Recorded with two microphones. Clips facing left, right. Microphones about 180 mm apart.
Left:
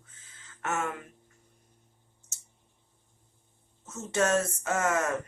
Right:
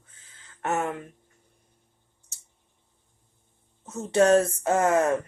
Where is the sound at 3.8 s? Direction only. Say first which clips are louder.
Right 8 dB; 35° right (ahead or behind).